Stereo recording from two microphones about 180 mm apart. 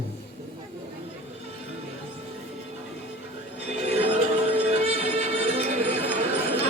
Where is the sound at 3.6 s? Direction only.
35° right (ahead or behind).